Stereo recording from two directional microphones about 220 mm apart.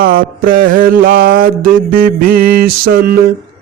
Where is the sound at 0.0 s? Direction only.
40° right (ahead or behind).